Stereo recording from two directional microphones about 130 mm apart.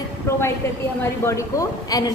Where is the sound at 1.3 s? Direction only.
25° left (ahead or behind).